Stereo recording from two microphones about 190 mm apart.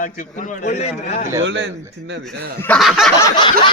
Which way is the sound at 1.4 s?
65° right (ahead or behind).